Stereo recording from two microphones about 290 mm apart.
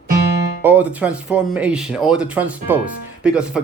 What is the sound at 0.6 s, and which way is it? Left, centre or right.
Speech, centre.